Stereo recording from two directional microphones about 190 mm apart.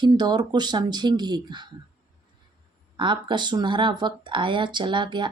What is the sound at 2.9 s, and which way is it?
Speech, 25° right (ahead or behind).